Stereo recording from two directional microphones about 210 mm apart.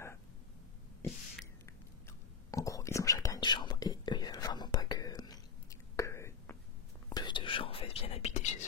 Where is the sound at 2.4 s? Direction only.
15° left (ahead or behind).